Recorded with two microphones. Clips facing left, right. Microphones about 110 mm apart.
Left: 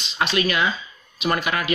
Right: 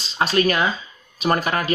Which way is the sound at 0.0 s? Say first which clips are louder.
Right 3 dB; 40° right (ahead or behind).